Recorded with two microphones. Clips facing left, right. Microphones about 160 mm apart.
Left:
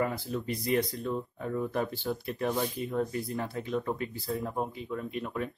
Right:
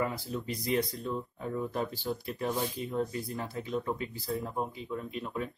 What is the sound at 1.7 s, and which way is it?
Speech, 55° left (ahead or behind).